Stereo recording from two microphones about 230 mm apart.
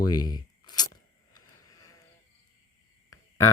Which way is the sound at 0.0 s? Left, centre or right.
Centre.